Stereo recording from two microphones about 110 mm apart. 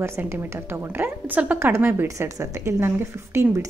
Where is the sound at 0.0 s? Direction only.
25° right (ahead or behind).